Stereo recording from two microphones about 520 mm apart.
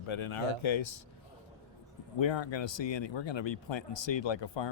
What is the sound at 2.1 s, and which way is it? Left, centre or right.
Speech, left.